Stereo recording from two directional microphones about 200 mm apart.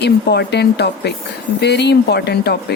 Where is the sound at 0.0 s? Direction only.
55° left (ahead or behind).